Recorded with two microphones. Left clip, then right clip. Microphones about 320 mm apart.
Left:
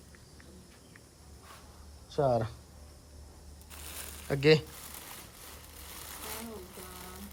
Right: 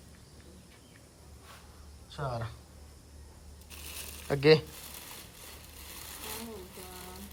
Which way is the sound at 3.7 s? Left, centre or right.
Centre.